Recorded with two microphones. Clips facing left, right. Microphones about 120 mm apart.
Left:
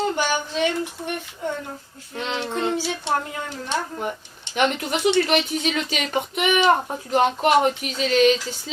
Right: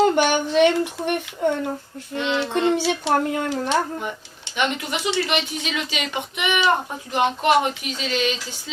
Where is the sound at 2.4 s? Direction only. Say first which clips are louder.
Right 4 dB; 80° right.